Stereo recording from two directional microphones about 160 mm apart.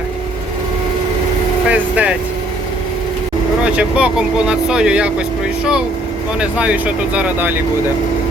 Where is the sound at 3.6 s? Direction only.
5° right (ahead or behind).